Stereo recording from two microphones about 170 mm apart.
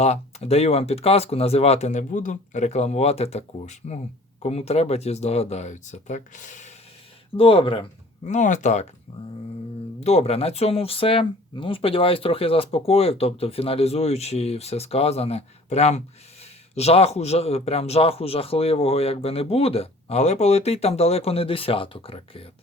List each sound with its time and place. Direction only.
0.0 s speech: 40° left (ahead or behind)
7.3 s speech: 30° left (ahead or behind)
8.2 s speech: 45° left (ahead or behind)
10.0 s speech: 40° left (ahead or behind)